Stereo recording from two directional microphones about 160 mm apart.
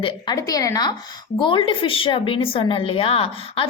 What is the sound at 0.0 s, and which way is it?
A woman's voice, 25° left (ahead or behind).